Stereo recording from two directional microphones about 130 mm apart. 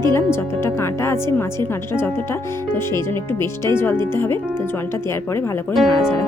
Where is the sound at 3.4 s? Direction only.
20° left (ahead or behind).